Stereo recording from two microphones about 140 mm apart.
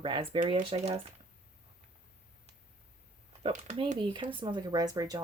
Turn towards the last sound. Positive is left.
turn(degrees=-25)  # may be behind; listen again after turning